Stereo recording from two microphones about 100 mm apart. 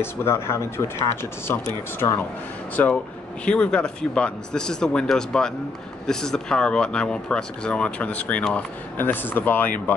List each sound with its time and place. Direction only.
0.0 s speech: 25° left (ahead or behind)
2.0 s speech: 25° left (ahead or behind)